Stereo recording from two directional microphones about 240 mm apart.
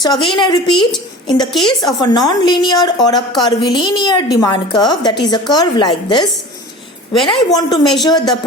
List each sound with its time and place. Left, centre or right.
0.0 s a woman's voice: centre
1.5 s a woman's voice: centre
1.8 s a woman's voice: centre
7.3 s a woman's voice: centre